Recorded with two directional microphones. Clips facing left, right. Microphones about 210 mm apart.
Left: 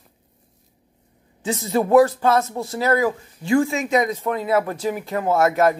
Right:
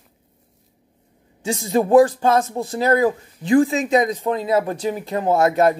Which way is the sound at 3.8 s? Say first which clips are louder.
Right 2 dB; 30° right (ahead or behind).